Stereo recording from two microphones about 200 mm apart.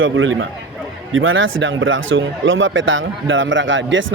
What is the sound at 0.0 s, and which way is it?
Speech, 75° right (ahead or behind).